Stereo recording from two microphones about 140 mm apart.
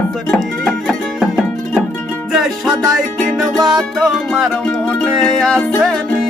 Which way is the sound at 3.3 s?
Centre (ahead or behind).